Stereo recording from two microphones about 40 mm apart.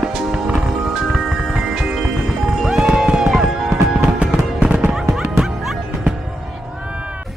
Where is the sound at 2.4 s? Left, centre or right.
Centre.